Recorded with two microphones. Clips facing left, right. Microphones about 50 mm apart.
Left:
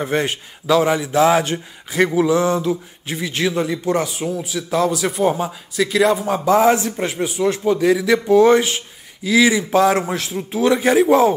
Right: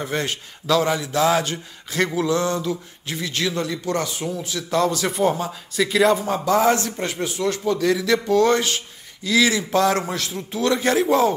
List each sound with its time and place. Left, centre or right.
0.0 s speech: left
5.8 s a man's voice: centre
6.2 s speech: left